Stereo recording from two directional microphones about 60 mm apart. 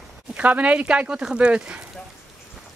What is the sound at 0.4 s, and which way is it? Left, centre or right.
Speech, right.